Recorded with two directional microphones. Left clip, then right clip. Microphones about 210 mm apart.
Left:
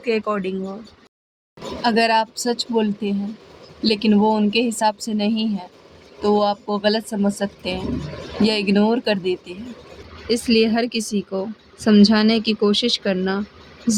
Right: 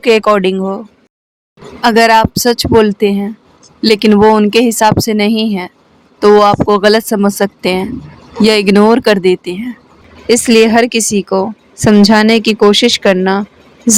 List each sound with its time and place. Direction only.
0.0 s a woman's voice: 50° right (ahead or behind)
1.8 s a woman's voice: 50° right (ahead or behind)